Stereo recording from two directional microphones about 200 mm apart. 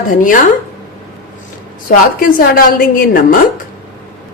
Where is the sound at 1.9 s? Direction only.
45° left (ahead or behind).